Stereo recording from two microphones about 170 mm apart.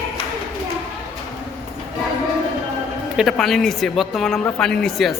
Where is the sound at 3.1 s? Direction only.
Centre (ahead or behind).